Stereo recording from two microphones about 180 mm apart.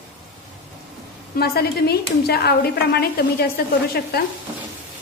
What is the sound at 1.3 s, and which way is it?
A woman's voice, 60° left (ahead or behind).